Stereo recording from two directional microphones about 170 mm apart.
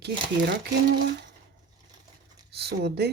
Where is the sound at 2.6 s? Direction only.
75° right (ahead or behind).